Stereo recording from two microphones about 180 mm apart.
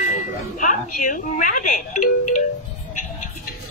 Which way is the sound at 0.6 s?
45° left (ahead or behind).